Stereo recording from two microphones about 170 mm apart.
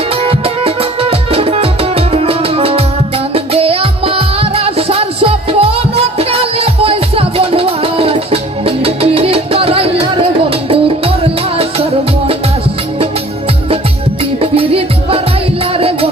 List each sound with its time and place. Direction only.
0.2 s music: 35° right (ahead or behind)
14.4 s music: 35° right (ahead or behind)